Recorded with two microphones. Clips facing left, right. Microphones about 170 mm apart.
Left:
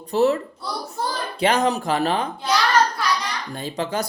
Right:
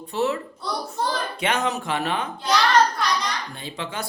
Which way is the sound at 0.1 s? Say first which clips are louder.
Left 6 dB; 40° left (ahead or behind).